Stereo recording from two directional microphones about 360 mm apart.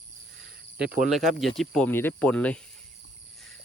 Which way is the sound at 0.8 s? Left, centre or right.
Right.